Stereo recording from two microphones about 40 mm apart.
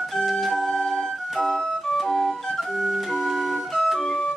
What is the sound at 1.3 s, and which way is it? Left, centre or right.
Music, centre.